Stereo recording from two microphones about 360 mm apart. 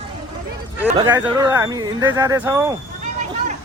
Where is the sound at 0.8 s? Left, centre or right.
Centre.